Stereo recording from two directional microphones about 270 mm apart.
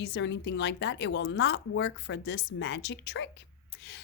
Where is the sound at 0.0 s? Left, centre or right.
Left.